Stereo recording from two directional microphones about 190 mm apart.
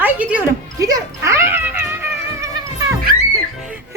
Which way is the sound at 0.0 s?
10° right (ahead or behind).